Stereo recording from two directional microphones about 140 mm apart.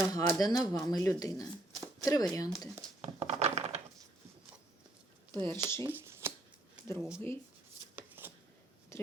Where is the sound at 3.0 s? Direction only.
50° right (ahead or behind).